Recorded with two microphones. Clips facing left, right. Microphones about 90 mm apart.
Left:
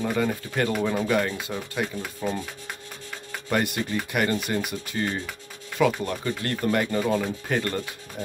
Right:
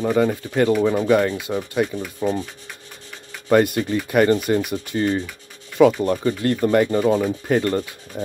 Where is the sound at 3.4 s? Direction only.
25° right (ahead or behind).